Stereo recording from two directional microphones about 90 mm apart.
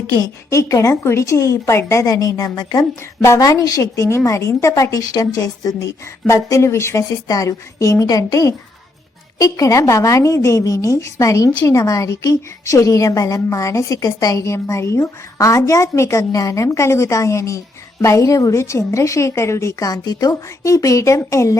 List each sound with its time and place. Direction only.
0.2 s a woman's voice: 35° left (ahead or behind)
19.9 s a woman's voice: 45° left (ahead or behind)